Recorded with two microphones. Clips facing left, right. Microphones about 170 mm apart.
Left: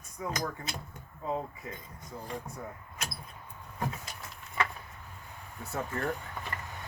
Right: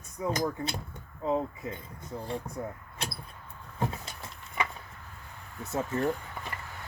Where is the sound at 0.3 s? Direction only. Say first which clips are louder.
Right 5 dB; 30° right (ahead or behind).